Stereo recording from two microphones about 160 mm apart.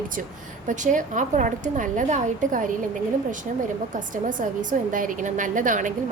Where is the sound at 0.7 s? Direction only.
50° right (ahead or behind).